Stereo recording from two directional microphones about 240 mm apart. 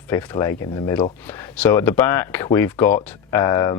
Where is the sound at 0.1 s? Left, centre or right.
Centre.